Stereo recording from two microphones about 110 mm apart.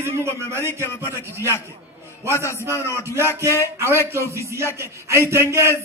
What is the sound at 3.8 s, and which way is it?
Speech, 25° right (ahead or behind).